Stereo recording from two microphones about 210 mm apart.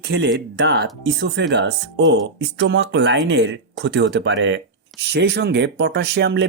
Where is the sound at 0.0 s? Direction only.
55° right (ahead or behind).